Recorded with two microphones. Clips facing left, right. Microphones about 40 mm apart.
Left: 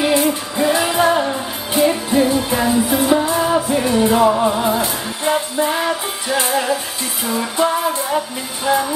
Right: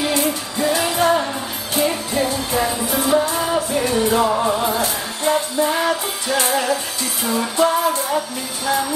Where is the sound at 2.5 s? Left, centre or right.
Left.